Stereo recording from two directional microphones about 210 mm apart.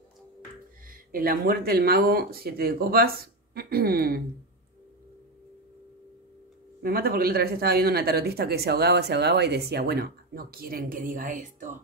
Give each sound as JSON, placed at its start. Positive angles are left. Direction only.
{"t": 0.8, "sound": "speech", "side_deg": -45}
{"t": 6.8, "sound": "speech", "side_deg": -45}